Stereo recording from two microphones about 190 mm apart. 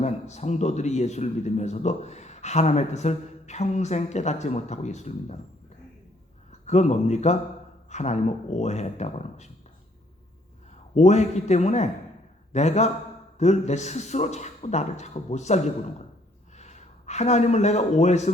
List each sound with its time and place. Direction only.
0.0 s speech: 35° left (ahead or behind)
6.5 s speech: 35° left (ahead or behind)
10.9 s a man's voice: 35° left (ahead or behind)